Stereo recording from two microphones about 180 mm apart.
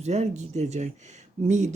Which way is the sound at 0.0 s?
40° right (ahead or behind).